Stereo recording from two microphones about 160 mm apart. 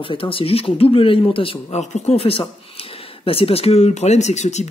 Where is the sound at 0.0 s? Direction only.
35° left (ahead or behind).